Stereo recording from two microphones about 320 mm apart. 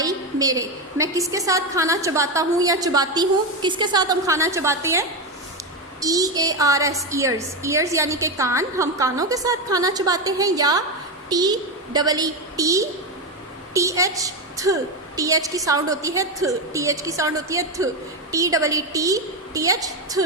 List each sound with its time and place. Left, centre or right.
0.0 s a woman's voice: centre